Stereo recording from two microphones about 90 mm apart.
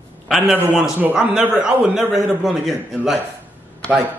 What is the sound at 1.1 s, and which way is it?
A man's voice, 10° right (ahead or behind).